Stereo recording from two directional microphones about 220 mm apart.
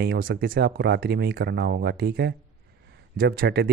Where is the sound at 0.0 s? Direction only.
45° right (ahead or behind).